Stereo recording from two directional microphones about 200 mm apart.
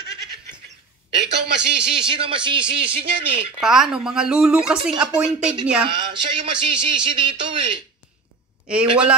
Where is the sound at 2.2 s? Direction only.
25° right (ahead or behind).